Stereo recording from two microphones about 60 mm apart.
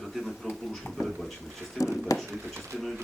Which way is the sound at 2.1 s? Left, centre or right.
Left.